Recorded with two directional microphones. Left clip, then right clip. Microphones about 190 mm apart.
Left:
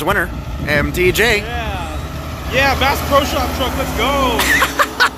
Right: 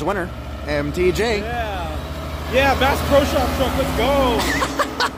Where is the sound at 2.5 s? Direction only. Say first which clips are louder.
Left 2 dB; 50° right (ahead or behind).